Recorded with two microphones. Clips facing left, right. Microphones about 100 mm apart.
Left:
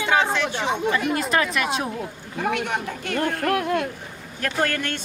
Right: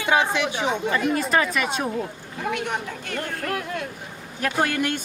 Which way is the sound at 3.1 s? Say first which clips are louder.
Left 6 dB; 60° left (ahead or behind).